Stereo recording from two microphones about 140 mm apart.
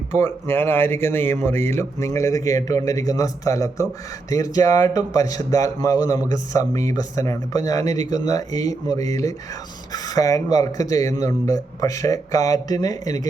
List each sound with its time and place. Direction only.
0.2 s speech: 15° left (ahead or behind)